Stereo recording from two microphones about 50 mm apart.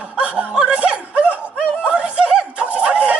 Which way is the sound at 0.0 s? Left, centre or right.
Right.